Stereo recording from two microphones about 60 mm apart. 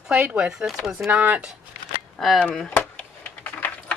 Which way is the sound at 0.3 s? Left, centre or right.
Centre.